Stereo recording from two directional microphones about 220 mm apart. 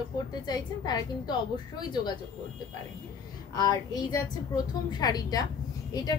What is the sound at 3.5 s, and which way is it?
A woman's voice, 15° left (ahead or behind).